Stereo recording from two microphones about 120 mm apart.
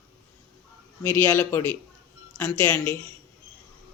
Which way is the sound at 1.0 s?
20° left (ahead or behind).